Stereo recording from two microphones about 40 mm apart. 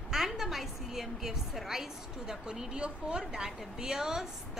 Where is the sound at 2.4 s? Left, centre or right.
Centre.